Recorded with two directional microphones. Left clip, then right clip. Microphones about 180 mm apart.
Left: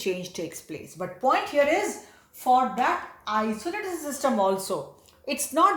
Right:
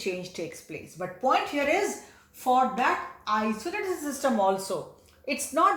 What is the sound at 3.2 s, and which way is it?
A woman's voice, 35° left (ahead or behind).